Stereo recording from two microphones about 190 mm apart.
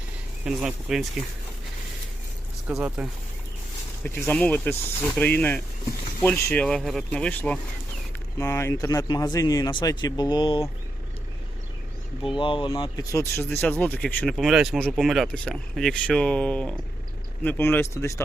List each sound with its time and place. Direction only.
0.4 s speech: centre (ahead or behind)
2.6 s speech: 10° right (ahead or behind)
4.0 s speech: 10° left (ahead or behind); by 10.6 s 25° left (ahead or behind)
12.3 s speech: 25° left (ahead or behind)